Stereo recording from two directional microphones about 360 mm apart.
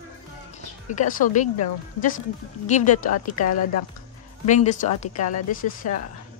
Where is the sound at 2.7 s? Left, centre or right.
Centre.